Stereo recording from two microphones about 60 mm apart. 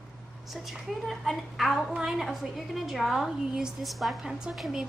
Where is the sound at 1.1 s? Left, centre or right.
Centre.